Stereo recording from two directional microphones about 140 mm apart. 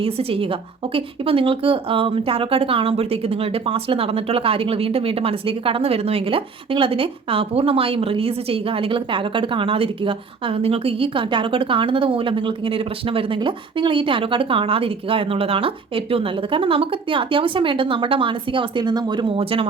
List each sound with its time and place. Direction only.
0.0 s speech: 40° right (ahead or behind)